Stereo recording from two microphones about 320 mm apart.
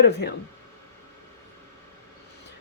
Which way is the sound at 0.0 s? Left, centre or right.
Left.